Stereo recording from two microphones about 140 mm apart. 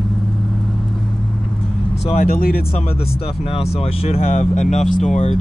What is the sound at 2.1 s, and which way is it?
Speech, 90° left.